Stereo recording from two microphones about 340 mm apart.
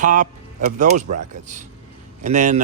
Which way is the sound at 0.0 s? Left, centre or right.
Right.